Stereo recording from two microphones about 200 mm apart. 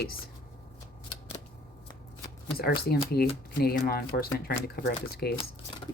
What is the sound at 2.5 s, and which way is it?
Speech, 50° left (ahead or behind).